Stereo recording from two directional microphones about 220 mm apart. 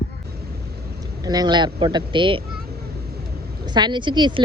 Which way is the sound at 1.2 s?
15° right (ahead or behind).